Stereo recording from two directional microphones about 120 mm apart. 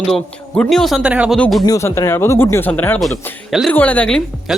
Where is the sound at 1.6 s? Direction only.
25° left (ahead or behind); by 4.2 s 10° left (ahead or behind).